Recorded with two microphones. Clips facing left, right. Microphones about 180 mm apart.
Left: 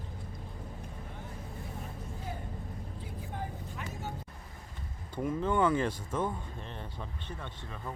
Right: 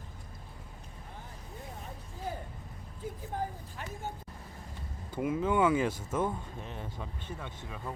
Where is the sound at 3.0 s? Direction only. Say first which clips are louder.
Right 6 dB; 40° right (ahead or behind).